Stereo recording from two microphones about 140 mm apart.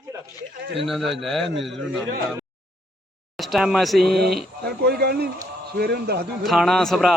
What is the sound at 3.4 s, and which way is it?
A man's voice, centre (ahead or behind).